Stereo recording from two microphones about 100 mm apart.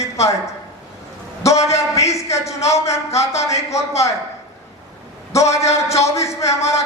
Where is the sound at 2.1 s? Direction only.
30° left (ahead or behind).